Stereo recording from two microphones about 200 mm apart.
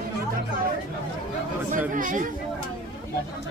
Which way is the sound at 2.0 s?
40° right (ahead or behind).